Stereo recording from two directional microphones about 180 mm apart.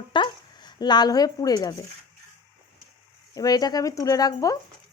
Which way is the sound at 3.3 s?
20° left (ahead or behind).